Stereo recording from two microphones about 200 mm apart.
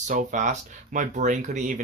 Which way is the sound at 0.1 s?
40° right (ahead or behind).